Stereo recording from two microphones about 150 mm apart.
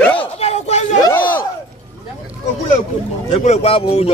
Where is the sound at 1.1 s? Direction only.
10° left (ahead or behind).